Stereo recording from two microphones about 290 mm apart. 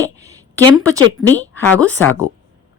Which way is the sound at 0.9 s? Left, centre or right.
Centre.